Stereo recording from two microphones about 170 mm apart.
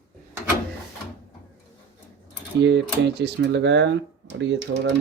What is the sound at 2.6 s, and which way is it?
Speech, 90° right.